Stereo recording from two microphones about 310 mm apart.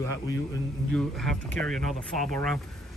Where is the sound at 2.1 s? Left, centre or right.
Left.